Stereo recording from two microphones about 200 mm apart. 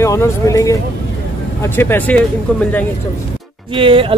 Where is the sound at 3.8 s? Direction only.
25° right (ahead or behind).